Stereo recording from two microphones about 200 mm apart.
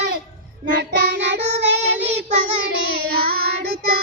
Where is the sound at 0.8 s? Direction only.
55° right (ahead or behind).